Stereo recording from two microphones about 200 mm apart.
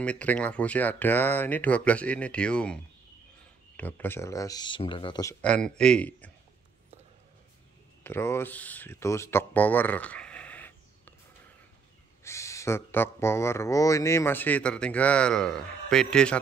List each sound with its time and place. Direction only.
0.0 s speech: 5° left (ahead or behind); by 5.3 s 25° left (ahead or behind)
5.4 s speech: 5° left (ahead or behind)
8.0 s speech: 10° left (ahead or behind)
12.2 s speech: 15° left (ahead or behind)